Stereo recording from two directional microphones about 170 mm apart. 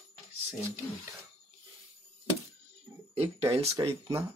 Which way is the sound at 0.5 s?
10° right (ahead or behind).